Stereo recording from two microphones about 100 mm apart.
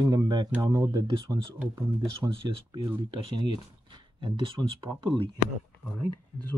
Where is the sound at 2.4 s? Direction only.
55° right (ahead or behind).